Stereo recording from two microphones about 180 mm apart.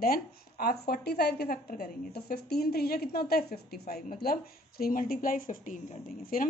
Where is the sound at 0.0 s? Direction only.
55° left (ahead or behind).